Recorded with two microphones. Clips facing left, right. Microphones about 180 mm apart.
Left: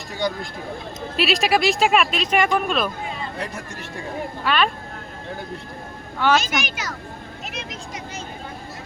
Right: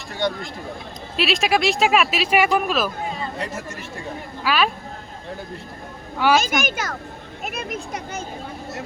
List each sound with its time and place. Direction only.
0.2 s speech: centre (ahead or behind)
6.1 s a child's voice: 10° right (ahead or behind)
6.4 s a child's voice: 50° right (ahead or behind)